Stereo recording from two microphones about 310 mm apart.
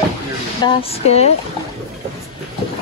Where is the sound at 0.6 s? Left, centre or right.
Centre.